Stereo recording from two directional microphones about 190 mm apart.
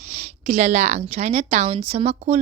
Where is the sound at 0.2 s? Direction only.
35° right (ahead or behind).